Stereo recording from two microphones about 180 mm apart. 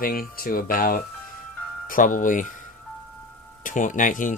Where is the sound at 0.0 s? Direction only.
55° left (ahead or behind).